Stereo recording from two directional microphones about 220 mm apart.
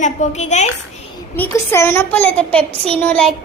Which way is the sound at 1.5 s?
10° left (ahead or behind).